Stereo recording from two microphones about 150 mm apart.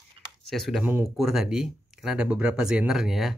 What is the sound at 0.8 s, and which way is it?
Speech, 15° right (ahead or behind).